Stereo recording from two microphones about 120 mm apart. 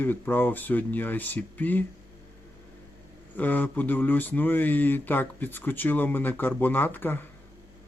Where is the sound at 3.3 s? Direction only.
15° left (ahead or behind).